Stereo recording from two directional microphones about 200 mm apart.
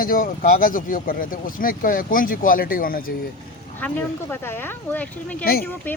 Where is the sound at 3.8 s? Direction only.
5° left (ahead or behind).